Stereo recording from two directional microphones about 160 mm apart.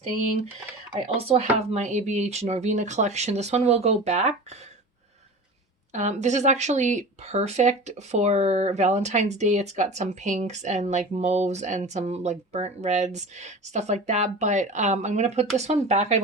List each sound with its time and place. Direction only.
1.0 s speech: 40° right (ahead or behind)
5.9 s speech: 45° right (ahead or behind)